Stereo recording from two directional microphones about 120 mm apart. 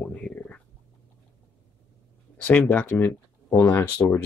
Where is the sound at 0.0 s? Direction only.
10° left (ahead or behind).